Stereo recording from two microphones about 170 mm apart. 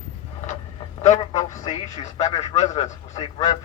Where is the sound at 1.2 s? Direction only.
25° left (ahead or behind).